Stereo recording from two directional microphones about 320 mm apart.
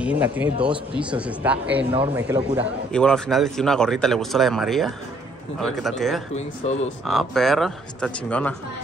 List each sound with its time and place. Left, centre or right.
0.0 s a man's voice: centre
6.3 s speech: centre
7.1 s a man's voice: centre